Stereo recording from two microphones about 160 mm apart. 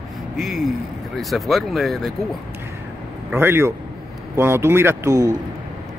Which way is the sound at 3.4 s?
15° right (ahead or behind).